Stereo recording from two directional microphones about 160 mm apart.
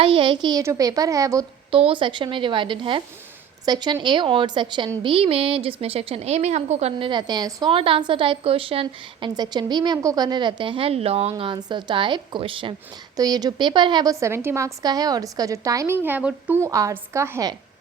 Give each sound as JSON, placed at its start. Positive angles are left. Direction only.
{"t": 0.0, "sound": "a woman's voice", "side_deg": -35}
{"t": 1.7, "sound": "a woman's voice", "side_deg": -35}
{"t": 7.1, "sound": "a woman's voice", "side_deg": -25}